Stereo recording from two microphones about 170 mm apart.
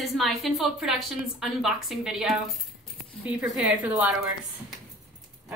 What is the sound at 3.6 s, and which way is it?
Speech, 10° right (ahead or behind).